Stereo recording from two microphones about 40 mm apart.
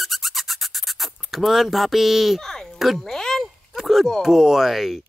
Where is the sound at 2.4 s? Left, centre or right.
Centre.